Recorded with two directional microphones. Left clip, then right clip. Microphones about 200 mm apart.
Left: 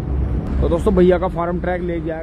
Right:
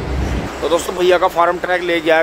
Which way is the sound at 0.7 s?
5° right (ahead or behind).